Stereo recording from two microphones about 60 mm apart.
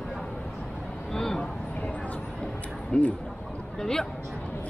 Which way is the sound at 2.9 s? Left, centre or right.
Centre.